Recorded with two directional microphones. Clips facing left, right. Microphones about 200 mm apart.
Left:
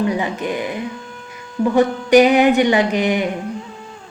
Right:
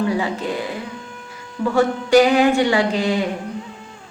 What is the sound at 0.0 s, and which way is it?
Speech, 20° left (ahead or behind).